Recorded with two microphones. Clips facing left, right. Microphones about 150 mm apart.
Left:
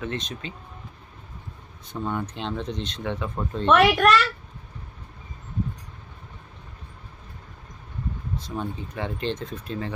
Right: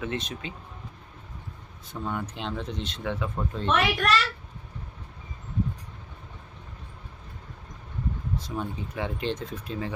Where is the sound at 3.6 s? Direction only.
60° left (ahead or behind).